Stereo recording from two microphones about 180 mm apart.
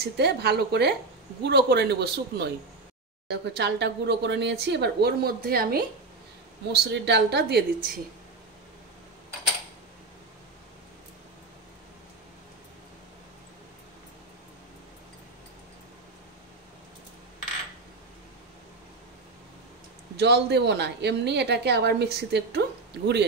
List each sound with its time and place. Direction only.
0.0 s a woman's voice: 65° right (ahead or behind)
6.7 s a woman's voice: 70° right (ahead or behind)
20.2 s a woman's voice: 65° right (ahead or behind)